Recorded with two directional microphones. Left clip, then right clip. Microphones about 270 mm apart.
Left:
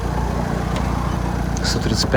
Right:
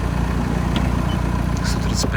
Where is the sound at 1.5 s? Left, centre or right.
Left.